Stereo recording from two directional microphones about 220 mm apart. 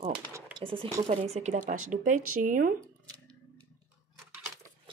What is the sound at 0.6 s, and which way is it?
A woman's voice, 20° right (ahead or behind).